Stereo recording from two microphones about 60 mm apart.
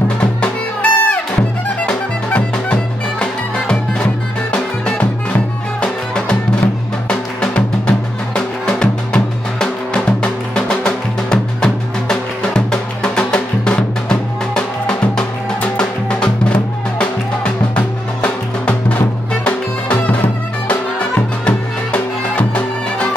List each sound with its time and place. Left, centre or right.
0.2 s music: left
21.5 s music: left